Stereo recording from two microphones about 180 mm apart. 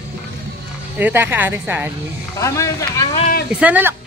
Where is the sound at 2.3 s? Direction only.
15° left (ahead or behind).